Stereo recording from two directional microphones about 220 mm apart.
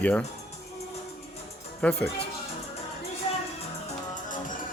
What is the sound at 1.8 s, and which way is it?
Speech, 5° left (ahead or behind).